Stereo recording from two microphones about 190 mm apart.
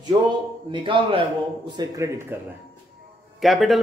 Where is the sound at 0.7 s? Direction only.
25° right (ahead or behind).